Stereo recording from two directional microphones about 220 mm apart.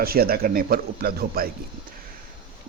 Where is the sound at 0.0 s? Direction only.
45° right (ahead or behind).